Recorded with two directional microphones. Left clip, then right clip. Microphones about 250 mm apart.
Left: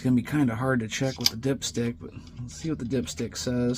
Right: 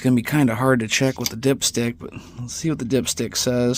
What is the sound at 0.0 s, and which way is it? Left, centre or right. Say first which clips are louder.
Speech: right 6 dB; right.